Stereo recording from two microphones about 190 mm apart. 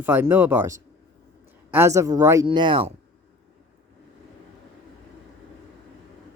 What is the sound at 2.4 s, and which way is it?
Speech, 25° right (ahead or behind).